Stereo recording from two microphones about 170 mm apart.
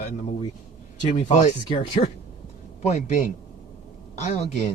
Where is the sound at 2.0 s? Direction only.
45° left (ahead or behind).